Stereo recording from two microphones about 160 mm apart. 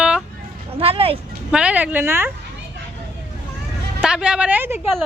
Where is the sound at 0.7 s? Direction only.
35° right (ahead or behind).